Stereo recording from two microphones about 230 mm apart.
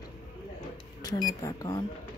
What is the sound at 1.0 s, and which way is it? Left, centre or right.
Speech, centre.